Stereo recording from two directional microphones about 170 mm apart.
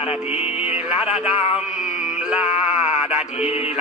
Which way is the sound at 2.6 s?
5° right (ahead or behind).